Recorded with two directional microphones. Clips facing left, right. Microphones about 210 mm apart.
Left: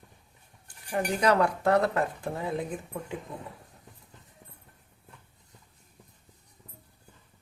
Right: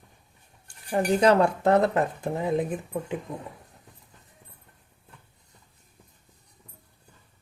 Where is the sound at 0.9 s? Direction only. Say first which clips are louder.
Right 5 dB; 30° right (ahead or behind).